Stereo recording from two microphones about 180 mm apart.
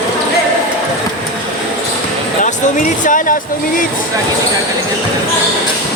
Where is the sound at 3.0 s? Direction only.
45° left (ahead or behind).